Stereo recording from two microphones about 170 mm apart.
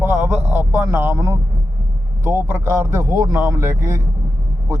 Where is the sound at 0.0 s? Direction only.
10° right (ahead or behind).